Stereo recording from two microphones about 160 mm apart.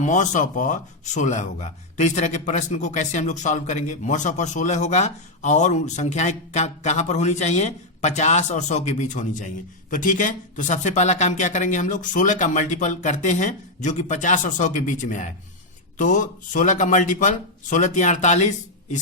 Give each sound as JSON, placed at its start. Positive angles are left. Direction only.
{"t": 0.0, "sound": "speech", "side_deg": 50}